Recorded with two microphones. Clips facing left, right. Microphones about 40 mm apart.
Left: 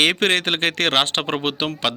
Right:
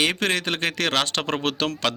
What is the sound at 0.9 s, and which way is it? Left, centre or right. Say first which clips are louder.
Speech: left 3 dB; left.